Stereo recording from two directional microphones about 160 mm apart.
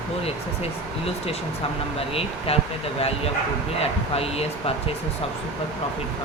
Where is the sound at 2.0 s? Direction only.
40° left (ahead or behind).